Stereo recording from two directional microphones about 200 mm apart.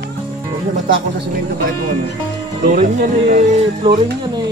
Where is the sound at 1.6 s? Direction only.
50° right (ahead or behind).